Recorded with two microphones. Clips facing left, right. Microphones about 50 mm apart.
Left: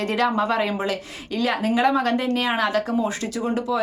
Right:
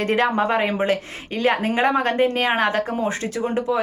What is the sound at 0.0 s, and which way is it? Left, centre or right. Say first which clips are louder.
Speech: right 2 dB; right.